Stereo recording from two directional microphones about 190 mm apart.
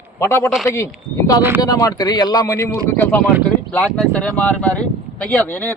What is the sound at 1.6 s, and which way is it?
Speech, 20° left (ahead or behind).